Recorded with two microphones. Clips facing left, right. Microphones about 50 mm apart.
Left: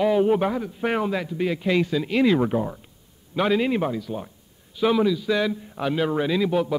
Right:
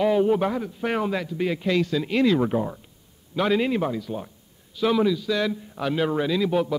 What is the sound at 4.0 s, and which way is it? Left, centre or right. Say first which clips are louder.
Speech: even; centre.